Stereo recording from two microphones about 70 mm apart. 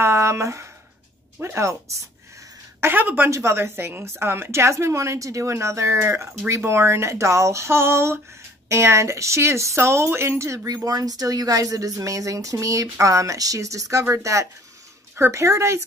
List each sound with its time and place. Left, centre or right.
0.0 s speech: right
2.8 s a woman's voice: right
3.3 s a woman's voice: right
10.9 s speech: right